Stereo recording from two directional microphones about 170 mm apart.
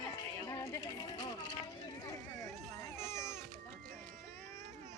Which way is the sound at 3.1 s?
15° left (ahead or behind).